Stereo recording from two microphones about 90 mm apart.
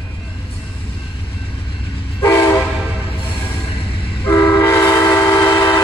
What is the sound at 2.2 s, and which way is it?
Train, 30° left (ahead or behind).